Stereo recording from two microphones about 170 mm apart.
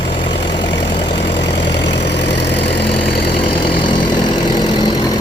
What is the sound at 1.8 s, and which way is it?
Vehicle, 90° left.